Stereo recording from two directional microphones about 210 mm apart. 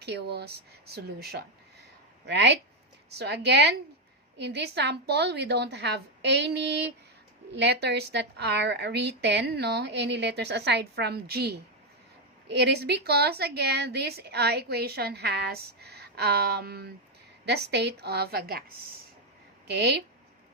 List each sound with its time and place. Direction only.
0.0 s a woman's voice: 50° right (ahead or behind)
19.6 s a woman's voice: 50° right (ahead or behind)